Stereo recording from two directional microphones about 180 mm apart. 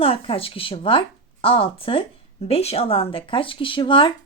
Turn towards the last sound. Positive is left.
turn(degrees=30)  # may be behind; listen again after turning